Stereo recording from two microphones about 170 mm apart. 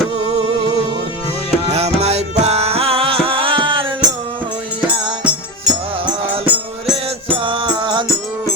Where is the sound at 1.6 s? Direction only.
40° right (ahead or behind).